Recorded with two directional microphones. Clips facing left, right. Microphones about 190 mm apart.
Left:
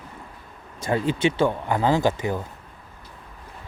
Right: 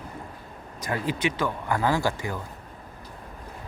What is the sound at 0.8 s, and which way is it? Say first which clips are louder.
Speech: left 5 dB; 25° left (ahead or behind).